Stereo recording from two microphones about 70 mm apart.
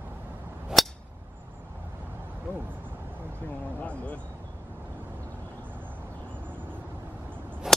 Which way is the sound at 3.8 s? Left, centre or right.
Centre.